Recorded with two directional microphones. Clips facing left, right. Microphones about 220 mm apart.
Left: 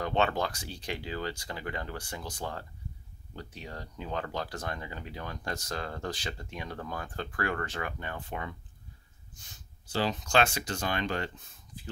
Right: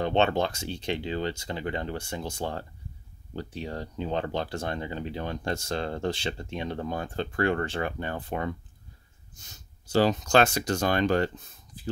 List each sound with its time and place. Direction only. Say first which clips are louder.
0.0 s speech: right 5 dB; 25° right (ahead or behind)